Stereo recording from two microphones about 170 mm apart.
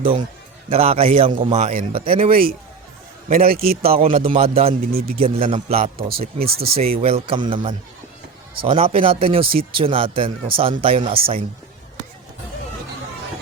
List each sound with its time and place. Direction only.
0.7 s speech: 35° right (ahead or behind)
2.3 s a man's voice: 60° right (ahead or behind)
3.9 s speech: 35° right (ahead or behind)
4.8 s a man's voice: 60° right (ahead or behind)
5.1 s speech: 35° right (ahead or behind)
5.8 s a man's voice: 60° right (ahead or behind)
6.7 s speech: 35° right (ahead or behind)